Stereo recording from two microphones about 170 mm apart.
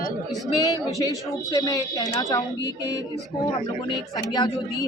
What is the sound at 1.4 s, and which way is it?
A woman's voice, 20° left (ahead or behind).